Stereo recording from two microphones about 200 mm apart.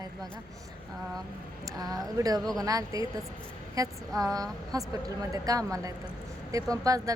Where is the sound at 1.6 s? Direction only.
20° right (ahead or behind).